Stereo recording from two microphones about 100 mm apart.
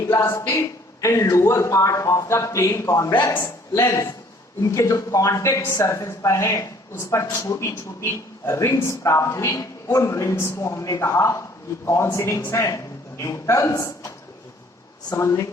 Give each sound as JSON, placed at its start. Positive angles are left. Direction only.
{"t": 0.1, "sound": "a man's voice", "side_deg": 25}
{"t": 15.1, "sound": "speech", "side_deg": 30}